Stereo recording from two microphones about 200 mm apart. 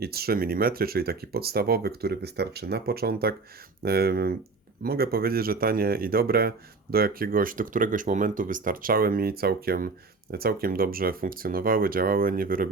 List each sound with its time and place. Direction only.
0.0 s speech: 50° right (ahead or behind)